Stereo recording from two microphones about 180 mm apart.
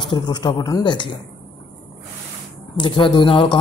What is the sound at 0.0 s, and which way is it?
Speech, 25° left (ahead or behind).